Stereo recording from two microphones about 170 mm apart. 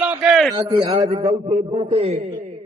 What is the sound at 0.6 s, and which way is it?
Speech, 25° right (ahead or behind).